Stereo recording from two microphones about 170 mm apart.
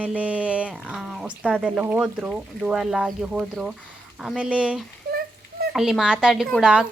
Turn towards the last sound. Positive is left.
turn(degrees=-5)  # may be behind; listen again after turning